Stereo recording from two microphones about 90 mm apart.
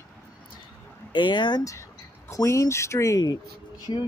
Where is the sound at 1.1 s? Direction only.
60° left (ahead or behind).